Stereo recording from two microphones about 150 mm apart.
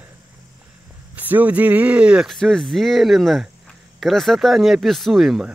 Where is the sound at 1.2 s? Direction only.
10° right (ahead or behind).